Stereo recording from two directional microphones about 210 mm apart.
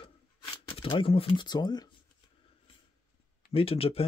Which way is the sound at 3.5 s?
25° left (ahead or behind).